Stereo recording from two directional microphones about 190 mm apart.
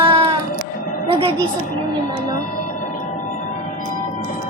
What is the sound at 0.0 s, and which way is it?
Music, 25° right (ahead or behind).